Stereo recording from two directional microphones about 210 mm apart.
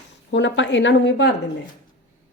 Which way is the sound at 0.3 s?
60° left (ahead or behind).